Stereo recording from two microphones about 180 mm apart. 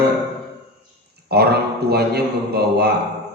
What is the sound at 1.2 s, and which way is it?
A man's voice, 60° right (ahead or behind).